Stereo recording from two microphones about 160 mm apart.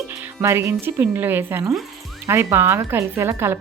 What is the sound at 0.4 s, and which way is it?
Speech, 15° right (ahead or behind).